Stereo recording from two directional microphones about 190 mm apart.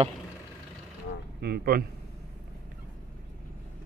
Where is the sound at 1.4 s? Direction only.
55° right (ahead or behind).